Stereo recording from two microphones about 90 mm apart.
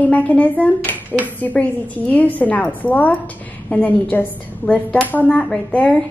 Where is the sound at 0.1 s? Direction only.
15° left (ahead or behind).